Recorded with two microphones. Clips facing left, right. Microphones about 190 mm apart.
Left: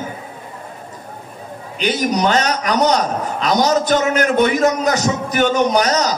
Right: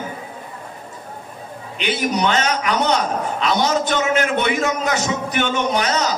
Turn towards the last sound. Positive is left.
turn(degrees=40)  # may be behind; listen again after turning